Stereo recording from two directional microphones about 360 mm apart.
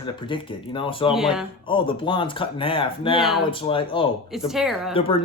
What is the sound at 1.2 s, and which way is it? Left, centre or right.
Speech, centre.